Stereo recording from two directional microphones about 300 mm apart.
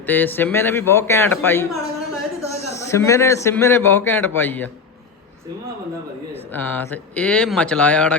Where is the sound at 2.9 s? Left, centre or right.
Centre.